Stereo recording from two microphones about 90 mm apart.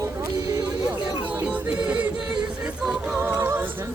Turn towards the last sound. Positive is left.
turn(degrees=-25)  # may be behind; listen again after turning